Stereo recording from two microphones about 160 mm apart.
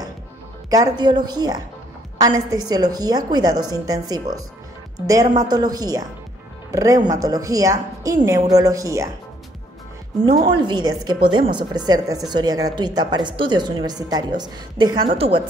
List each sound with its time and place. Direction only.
0.7 s a woman's voice: 25° right (ahead or behind)
10.4 s a woman's voice: 30° right (ahead or behind)